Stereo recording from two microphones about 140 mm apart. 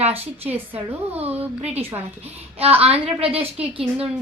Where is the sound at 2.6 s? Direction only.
45° right (ahead or behind).